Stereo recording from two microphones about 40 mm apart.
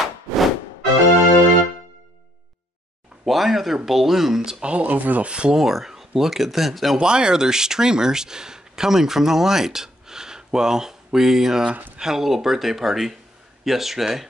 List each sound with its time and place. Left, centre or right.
0.0 s music: centre
3.3 s speech: centre
4.4 s speech: right
4.7 s speech: right
5.3 s speech: right
5.6 s speech: centre
7.0 s speech: centre